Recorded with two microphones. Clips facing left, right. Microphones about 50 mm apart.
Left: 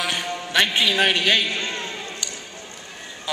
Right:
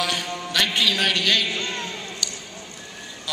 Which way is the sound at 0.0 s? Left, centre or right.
Centre.